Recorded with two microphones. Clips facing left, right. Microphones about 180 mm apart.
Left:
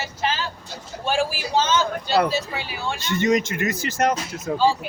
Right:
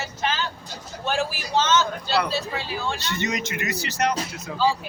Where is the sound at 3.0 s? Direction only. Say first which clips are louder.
Left 7 dB; 50° left (ahead or behind).